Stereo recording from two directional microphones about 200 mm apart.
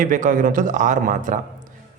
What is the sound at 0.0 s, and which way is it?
A man's voice, 40° right (ahead or behind).